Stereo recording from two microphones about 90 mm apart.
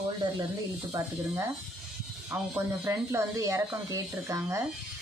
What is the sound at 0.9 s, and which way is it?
Speech, 45° right (ahead or behind).